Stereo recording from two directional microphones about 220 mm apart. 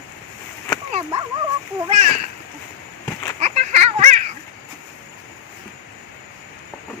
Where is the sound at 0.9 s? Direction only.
30° right (ahead or behind).